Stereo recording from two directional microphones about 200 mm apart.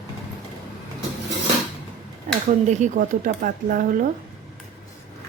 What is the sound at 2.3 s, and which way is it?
Speech, 35° right (ahead or behind).